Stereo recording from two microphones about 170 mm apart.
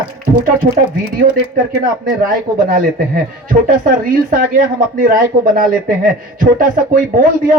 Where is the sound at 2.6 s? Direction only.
55° right (ahead or behind).